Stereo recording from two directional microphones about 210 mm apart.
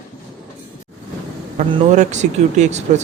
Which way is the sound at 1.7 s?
35° right (ahead or behind).